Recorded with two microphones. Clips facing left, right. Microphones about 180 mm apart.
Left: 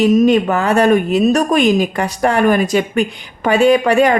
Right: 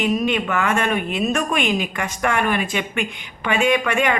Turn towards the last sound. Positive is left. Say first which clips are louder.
# left 8 dB
turn(degrees=35)  # may be behind; listen again after turning